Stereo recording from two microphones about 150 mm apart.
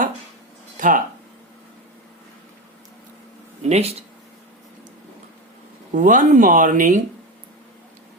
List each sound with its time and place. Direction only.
0.8 s speech: 60° right (ahead or behind)
3.6 s speech: 50° right (ahead or behind)
5.9 s speech: 60° right (ahead or behind)